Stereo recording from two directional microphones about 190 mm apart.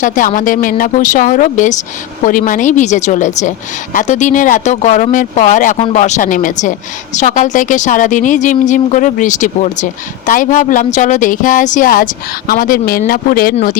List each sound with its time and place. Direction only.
0.0 s a woman's voice: 45° left (ahead or behind)